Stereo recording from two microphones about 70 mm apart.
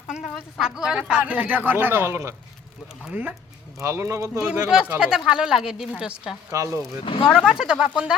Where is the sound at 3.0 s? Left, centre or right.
Right.